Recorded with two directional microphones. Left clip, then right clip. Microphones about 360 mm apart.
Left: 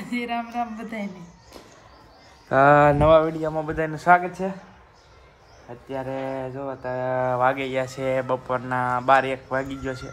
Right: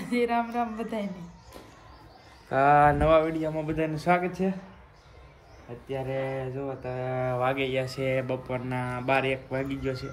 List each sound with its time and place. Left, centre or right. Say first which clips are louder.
0.0 s speech: right 2 dB; centre
2.5 s a sound: left 5 dB; left
3.6 s speech: left 8 dB; centre
5.9 s speech: left 2 dB; centre